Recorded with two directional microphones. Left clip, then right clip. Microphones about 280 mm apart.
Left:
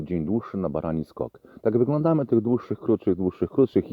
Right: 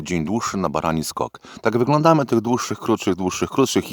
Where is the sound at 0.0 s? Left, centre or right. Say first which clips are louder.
Right 5 dB; centre.